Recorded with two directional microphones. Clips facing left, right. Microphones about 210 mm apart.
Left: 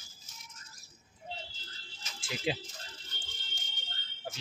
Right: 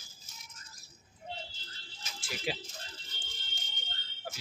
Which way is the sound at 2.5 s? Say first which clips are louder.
Left 3 dB; 25° left (ahead or behind).